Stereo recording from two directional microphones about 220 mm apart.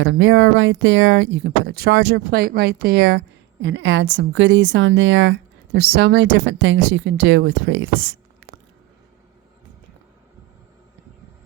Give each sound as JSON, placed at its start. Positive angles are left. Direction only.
{"t": 0.0, "sound": "a woman's voice", "side_deg": -55}